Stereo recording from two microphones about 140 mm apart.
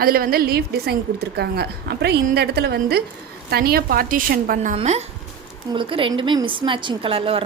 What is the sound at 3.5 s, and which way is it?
A woman's voice, 90° right.